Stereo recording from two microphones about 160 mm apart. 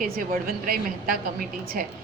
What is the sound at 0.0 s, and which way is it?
A woman's voice, 60° right (ahead or behind).